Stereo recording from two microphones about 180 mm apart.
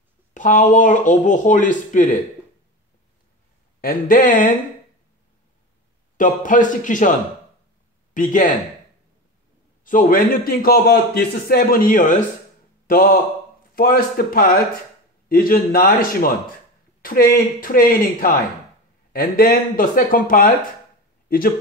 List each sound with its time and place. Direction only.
0.3 s a man's voice: 45° left (ahead or behind)
3.8 s a man's voice: 50° left (ahead or behind)
6.1 s a man's voice: 45° left (ahead or behind)
9.8 s a man's voice: 50° left (ahead or behind)